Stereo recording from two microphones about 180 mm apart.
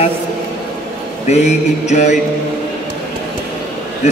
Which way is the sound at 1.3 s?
40° left (ahead or behind).